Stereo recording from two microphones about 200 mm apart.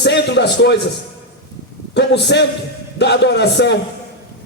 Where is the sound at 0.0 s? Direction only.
60° left (ahead or behind).